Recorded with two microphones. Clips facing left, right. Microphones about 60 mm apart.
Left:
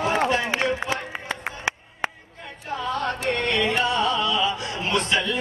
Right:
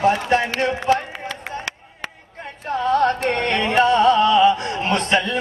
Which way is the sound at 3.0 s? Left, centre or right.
Right.